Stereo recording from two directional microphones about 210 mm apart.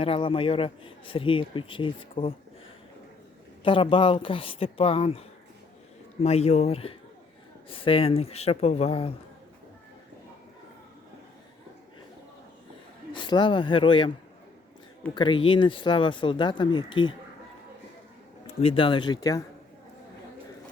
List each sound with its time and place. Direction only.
0.0 s speech: 25° left (ahead or behind)
3.6 s speech: 25° left (ahead or behind)
6.2 s speech: 30° left (ahead or behind)
13.1 s speech: 20° left (ahead or behind)
15.1 s speech: 20° left (ahead or behind)
18.6 s speech: 25° left (ahead or behind)